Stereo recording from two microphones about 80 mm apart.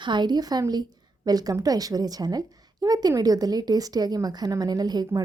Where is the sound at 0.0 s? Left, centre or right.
Right.